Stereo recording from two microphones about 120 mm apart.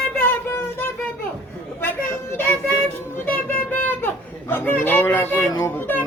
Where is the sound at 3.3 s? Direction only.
15° left (ahead or behind).